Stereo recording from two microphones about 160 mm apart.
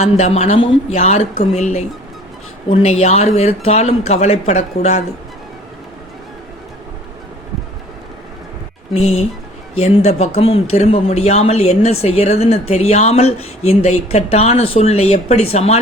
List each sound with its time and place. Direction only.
0.0 s speech: 40° left (ahead or behind)
8.9 s speech: 40° left (ahead or behind)